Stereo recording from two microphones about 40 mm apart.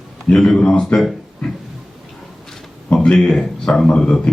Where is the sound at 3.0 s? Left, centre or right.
Left.